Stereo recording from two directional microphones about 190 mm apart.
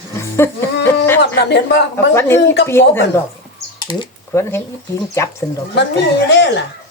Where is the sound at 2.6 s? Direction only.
10° left (ahead or behind).